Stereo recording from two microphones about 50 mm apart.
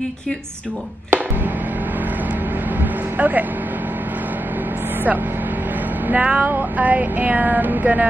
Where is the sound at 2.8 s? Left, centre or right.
Right.